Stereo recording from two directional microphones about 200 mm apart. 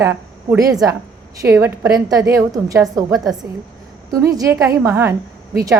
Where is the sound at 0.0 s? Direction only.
15° right (ahead or behind).